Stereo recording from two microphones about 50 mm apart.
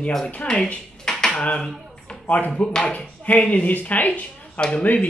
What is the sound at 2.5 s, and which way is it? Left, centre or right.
Speech, left.